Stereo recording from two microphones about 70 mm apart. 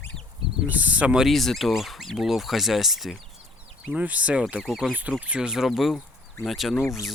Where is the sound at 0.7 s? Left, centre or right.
Right.